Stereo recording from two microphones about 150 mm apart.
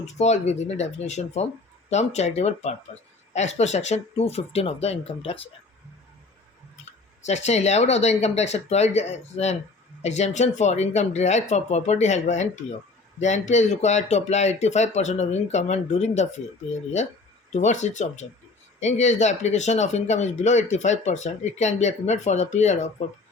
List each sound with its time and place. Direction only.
0.0 s speech: 50° left (ahead or behind)
7.3 s speech: 50° left (ahead or behind)
17.5 s speech: 50° left (ahead or behind)